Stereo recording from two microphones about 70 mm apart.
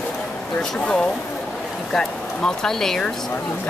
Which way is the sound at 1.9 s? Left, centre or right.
Centre.